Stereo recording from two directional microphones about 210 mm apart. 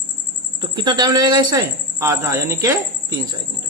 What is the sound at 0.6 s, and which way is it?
Speech, 20° right (ahead or behind).